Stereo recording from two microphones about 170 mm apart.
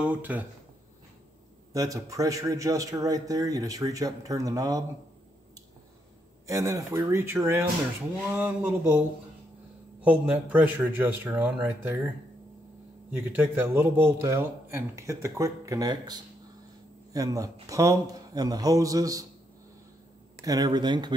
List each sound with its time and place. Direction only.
0.0 s a man's voice: 10° right (ahead or behind)
1.7 s a man's voice: 20° right (ahead or behind)
6.4 s a man's voice: 20° right (ahead or behind)
10.0 s a man's voice: 5° right (ahead or behind)
13.1 s a man's voice: 10° right (ahead or behind)
20.4 s a man's voice: 25° right (ahead or behind)